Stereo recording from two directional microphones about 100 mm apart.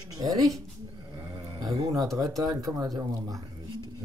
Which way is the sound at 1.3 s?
45° right (ahead or behind).